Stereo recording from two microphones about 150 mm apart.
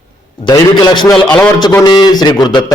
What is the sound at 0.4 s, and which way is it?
Speech, 25° left (ahead or behind).